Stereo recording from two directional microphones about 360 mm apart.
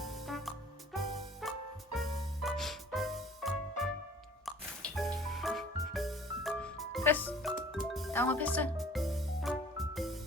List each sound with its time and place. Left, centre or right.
0.0 s music: centre